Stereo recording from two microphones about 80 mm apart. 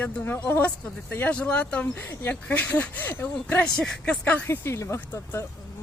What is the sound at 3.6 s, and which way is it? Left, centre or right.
Speech, centre.